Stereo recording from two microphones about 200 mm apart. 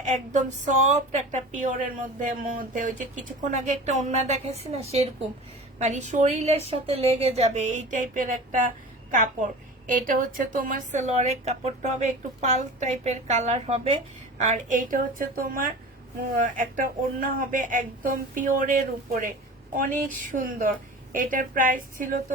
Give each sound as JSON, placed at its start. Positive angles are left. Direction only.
{"t": 0.3, "sound": "speech", "side_deg": -35}